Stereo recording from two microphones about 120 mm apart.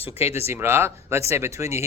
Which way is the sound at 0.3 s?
20° right (ahead or behind).